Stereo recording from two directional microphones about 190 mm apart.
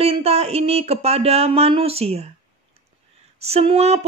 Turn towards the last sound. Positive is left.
turn(degrees=-35)  # may be behind; listen again after turning